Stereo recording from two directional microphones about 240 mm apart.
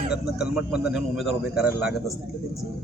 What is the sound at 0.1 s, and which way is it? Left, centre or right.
A man's voice, centre.